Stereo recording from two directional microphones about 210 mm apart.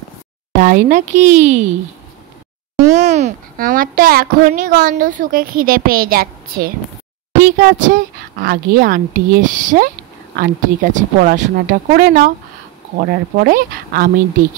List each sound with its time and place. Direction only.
0.6 s a child's voice: 40° right (ahead or behind)
3.0 s a child's voice: 35° right (ahead or behind)